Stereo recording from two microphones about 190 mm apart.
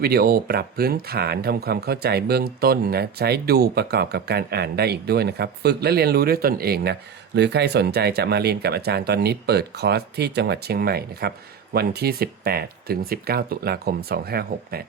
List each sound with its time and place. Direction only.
0.0 s speech: 50° right (ahead or behind)
7.3 s speech: 65° right (ahead or behind)